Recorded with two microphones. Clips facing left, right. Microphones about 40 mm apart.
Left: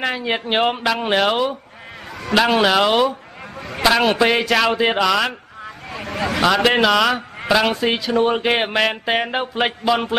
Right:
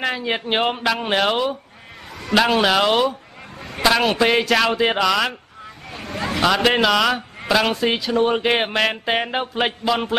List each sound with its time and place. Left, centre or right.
0.0 s a man's voice: centre
5.9 s a sound: left
6.4 s speech: centre